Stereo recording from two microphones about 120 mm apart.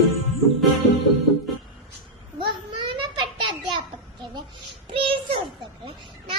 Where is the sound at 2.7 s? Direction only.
45° right (ahead or behind).